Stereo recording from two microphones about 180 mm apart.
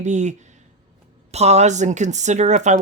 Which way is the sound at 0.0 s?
40° right (ahead or behind).